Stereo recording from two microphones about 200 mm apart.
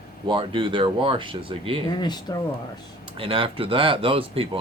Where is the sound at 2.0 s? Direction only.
20° left (ahead or behind).